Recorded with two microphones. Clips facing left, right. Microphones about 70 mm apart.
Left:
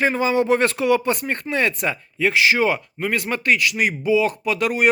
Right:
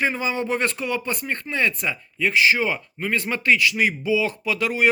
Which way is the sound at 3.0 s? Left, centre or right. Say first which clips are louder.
Left 3 dB; centre.